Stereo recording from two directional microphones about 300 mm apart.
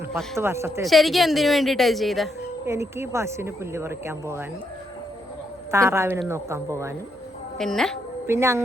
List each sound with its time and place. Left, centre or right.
0.1 s speech: centre
5.7 s speech: centre
7.6 s a woman's voice: centre